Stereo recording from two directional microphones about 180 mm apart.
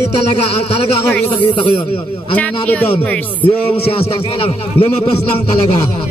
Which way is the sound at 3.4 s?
30° left (ahead or behind).